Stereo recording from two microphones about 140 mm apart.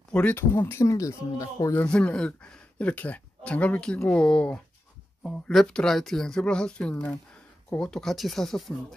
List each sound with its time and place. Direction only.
0.1 s speech: 10° left (ahead or behind)
1.9 s speech: 10° left (ahead or behind)